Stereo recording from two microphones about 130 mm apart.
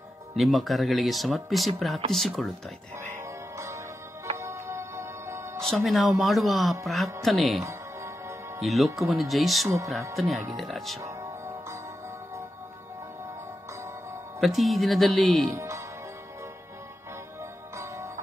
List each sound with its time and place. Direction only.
0.4 s speech: centre (ahead or behind)
3.2 s music: 20° right (ahead or behind)
5.6 s speech: centre (ahead or behind)
7.6 s music: 20° right (ahead or behind)
8.5 s speech: centre (ahead or behind)
11.0 s music: 25° right (ahead or behind)
14.4 s speech: centre (ahead or behind)
15.5 s speech: 20° right (ahead or behind)
17.4 s music: 20° right (ahead or behind)